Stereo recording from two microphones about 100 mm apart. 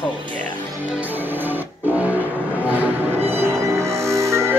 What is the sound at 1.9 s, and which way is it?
Train, 15° right (ahead or behind).